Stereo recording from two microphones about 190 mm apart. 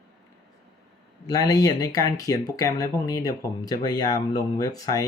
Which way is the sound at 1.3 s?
20° left (ahead or behind).